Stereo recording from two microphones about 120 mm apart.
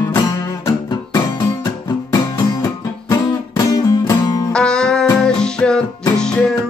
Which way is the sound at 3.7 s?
30° left (ahead or behind).